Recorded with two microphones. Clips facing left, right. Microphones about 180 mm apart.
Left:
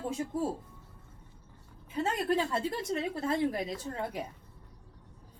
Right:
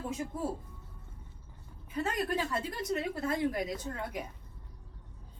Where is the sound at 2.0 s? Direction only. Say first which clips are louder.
Left 3 dB; 25° left (ahead or behind).